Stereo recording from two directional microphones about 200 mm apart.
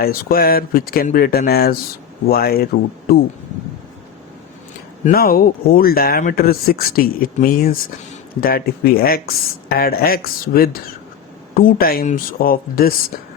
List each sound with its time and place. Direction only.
0.0 s speech: 50° left (ahead or behind)
5.0 s speech: 50° left (ahead or behind)